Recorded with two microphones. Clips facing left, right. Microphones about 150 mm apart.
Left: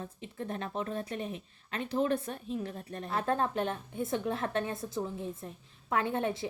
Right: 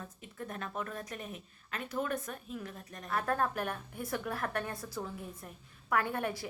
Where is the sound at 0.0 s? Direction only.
30° left (ahead or behind).